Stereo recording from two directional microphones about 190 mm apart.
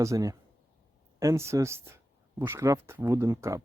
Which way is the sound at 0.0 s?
15° right (ahead or behind).